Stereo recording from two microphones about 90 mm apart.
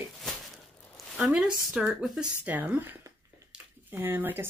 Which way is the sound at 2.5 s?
20° right (ahead or behind).